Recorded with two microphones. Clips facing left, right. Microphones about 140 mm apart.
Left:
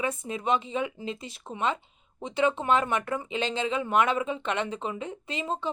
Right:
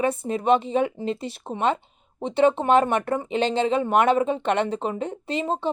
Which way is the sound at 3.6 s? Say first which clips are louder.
Right 4 dB; 35° right (ahead or behind).